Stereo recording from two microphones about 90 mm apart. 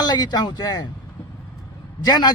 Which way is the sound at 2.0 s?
50° left (ahead or behind).